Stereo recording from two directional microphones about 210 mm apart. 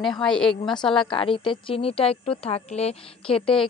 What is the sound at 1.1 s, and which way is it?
A woman's voice, 25° left (ahead or behind).